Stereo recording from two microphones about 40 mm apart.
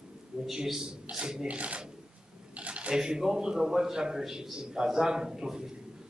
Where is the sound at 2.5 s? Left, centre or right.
Right.